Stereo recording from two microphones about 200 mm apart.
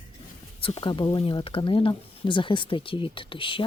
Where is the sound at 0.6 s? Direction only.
25° left (ahead or behind).